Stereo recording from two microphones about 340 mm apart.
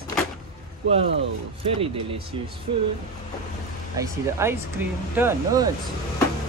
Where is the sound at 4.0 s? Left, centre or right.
Centre.